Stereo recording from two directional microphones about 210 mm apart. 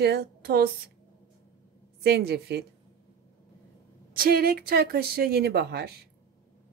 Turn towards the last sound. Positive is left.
turn(degrees=-50)  # may be behind; listen again after turning